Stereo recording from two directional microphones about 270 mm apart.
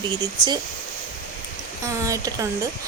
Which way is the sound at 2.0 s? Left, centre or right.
Centre.